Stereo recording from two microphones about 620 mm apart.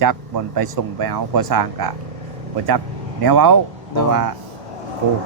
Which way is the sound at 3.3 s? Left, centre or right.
Right.